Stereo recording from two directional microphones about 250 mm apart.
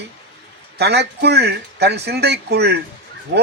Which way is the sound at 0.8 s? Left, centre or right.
Right.